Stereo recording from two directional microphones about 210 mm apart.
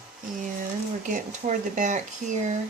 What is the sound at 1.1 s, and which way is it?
Speech, 35° right (ahead or behind).